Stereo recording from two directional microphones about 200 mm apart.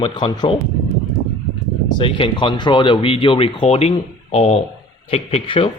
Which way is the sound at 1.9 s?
25° left (ahead or behind).